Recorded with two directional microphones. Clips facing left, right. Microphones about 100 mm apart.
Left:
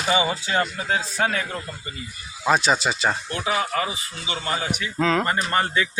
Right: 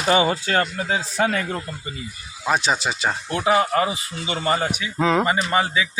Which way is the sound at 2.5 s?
15° right (ahead or behind).